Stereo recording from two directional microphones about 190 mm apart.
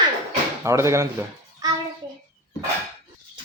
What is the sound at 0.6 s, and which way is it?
Speech, 15° right (ahead or behind).